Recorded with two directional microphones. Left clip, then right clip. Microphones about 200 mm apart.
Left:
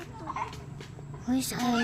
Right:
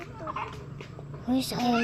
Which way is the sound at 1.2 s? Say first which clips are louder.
Right 2 dB; 10° left (ahead or behind).